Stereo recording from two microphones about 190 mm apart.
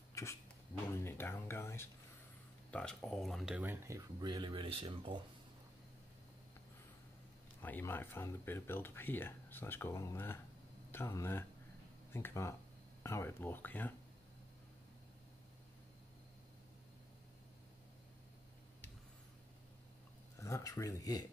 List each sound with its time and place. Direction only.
0.1 s a sound: 15° left (ahead or behind)
0.9 s speech: 10° left (ahead or behind); by 5.2 s 25° right (ahead or behind)
7.6 s speech: 10° left (ahead or behind)
20.3 s speech: 15° left (ahead or behind)